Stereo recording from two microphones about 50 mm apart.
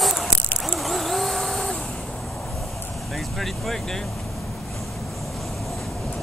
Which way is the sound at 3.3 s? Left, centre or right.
Centre.